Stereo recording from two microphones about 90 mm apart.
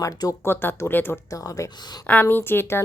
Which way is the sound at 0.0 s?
40° left (ahead or behind).